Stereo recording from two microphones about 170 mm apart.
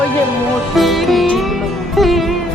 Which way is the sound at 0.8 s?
Centre (ahead or behind).